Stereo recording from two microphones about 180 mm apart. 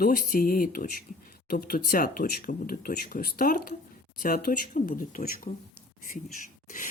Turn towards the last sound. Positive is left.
turn(degrees=50)  # may be behind; listen again after turning